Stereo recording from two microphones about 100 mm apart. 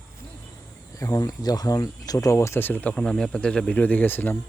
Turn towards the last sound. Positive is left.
turn(degrees=20)  # may be behind; listen again after turning